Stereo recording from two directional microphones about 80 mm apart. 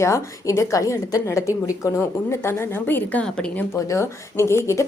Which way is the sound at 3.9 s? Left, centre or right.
Left.